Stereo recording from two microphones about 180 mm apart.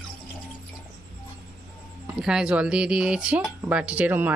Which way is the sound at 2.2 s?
5° right (ahead or behind).